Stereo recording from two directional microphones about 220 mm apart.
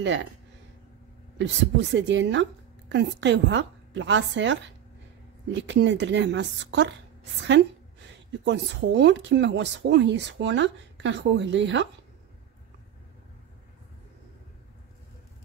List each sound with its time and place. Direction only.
0.0 s speech: 60° right (ahead or behind)
1.4 s a woman's voice: 55° right (ahead or behind)
8.3 s speech: 55° right (ahead or behind)